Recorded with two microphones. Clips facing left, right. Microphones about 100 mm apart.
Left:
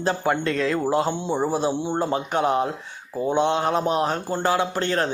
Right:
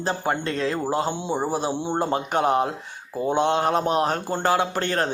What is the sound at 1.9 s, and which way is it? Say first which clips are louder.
Speech: even; 50° right (ahead or behind).